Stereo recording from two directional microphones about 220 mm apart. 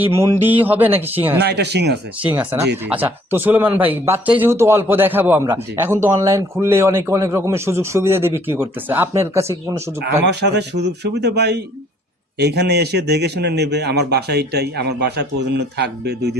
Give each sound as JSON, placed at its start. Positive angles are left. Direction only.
{"t": 0.0, "sound": "a man's voice", "side_deg": -10}
{"t": 1.4, "sound": "a man's voice", "side_deg": -50}
{"t": 2.3, "sound": "a man's voice", "side_deg": -5}
{"t": 10.0, "sound": "a man's voice", "side_deg": -50}